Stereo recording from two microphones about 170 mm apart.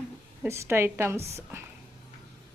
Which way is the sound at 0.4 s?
15° right (ahead or behind).